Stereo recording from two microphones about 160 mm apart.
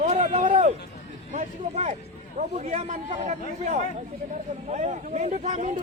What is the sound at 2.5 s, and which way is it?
Speech, 45° right (ahead or behind).